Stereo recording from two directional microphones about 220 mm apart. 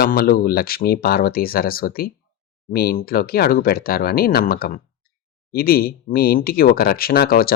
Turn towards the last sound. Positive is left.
turn(degrees=45)  # may be behind; listen again after turning